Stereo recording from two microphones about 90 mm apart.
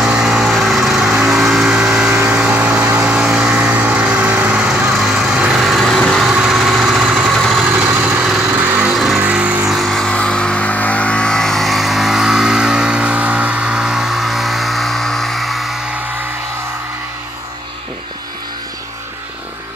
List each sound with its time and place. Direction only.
0.0 s lawn mower: 5° right (ahead or behind)
2.1 s vehicle: 15° right (ahead or behind); by 6.2 s 5° left (ahead or behind)
6.2 s vehicle: 10° right (ahead or behind)
7.3 s vehicle: 5° left (ahead or behind)
7.7 s vehicle: 20° right (ahead or behind)
8.9 s vehicle: 5° right (ahead or behind)
9.2 s vehicle: 15° right (ahead or behind)
9.7 s vehicle: centre (ahead or behind)